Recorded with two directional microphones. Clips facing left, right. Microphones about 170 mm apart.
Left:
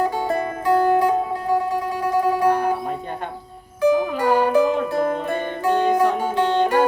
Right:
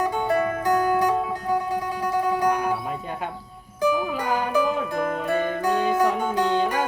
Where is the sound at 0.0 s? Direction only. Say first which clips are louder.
Left 1 dB; 30° left (ahead or behind).